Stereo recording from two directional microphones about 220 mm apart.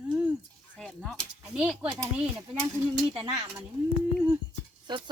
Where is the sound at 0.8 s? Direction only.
5° left (ahead or behind).